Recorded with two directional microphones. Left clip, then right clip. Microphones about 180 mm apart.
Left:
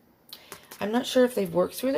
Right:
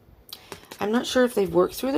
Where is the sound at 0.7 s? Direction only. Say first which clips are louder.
Right 1 dB; 45° right (ahead or behind).